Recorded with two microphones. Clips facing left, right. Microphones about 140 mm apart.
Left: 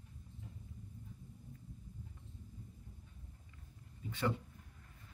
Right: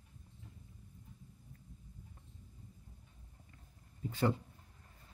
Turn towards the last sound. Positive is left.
turn(degrees=-40)  # may be behind; listen again after turning